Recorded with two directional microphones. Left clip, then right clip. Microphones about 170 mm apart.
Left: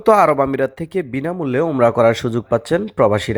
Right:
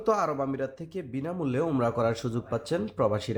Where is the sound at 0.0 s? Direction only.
40° left (ahead or behind).